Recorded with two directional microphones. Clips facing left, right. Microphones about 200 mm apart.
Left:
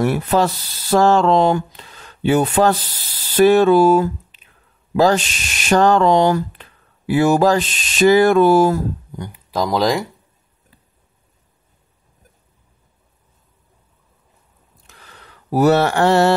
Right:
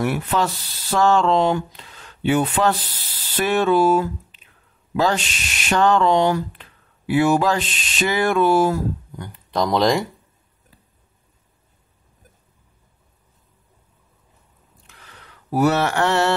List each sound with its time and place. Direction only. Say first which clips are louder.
0.0 s speech: left 5 dB; 40° left (ahead or behind)
9.2 s speech: left 1 dB; 10° left (ahead or behind)
15.5 s speech: left 4 dB; 35° left (ahead or behind)